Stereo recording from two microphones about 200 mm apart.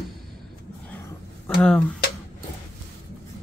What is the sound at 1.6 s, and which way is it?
Speech, centre (ahead or behind).